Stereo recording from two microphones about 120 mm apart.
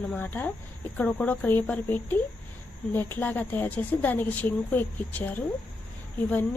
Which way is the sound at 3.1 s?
15° left (ahead or behind).